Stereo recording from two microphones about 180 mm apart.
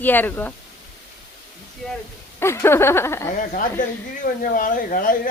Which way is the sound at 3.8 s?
50° left (ahead or behind).